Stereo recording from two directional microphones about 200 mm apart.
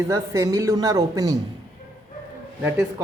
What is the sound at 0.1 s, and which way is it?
Speech, 15° right (ahead or behind).